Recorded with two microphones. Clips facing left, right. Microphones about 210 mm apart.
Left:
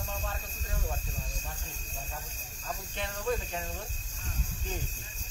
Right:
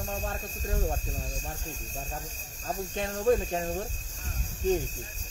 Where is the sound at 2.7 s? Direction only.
40° right (ahead or behind).